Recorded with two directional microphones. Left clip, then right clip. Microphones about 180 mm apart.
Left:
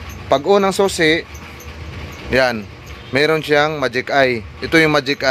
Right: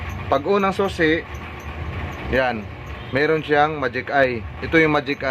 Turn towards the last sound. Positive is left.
turn(degrees=50)  # may be behind; listen again after turning